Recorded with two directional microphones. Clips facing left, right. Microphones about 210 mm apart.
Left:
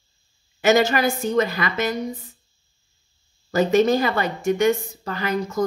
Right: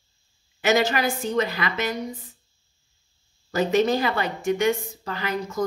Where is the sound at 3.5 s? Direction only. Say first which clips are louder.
Left 3 dB; 45° left (ahead or behind).